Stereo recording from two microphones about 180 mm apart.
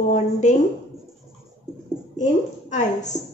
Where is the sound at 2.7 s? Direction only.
40° left (ahead or behind).